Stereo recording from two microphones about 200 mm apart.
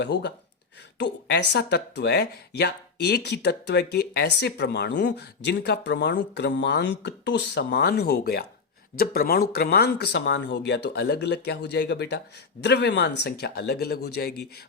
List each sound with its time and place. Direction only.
0.0 s speech: 60° left (ahead or behind)